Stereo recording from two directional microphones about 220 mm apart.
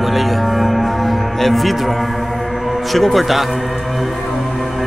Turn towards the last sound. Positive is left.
turn(degrees=0)  # may be behind; listen again after turning